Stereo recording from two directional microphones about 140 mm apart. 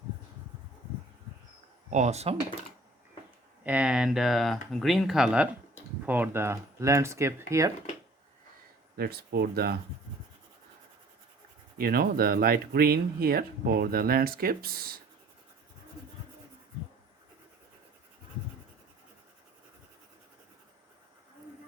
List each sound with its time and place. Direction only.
1.9 s speech: 55° right (ahead or behind)
3.6 s speech: 10° right (ahead or behind)
9.0 s speech: 90° right
11.8 s speech: 90° right